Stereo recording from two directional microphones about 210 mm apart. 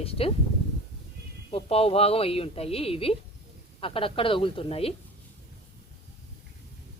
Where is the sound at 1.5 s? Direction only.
25° left (ahead or behind).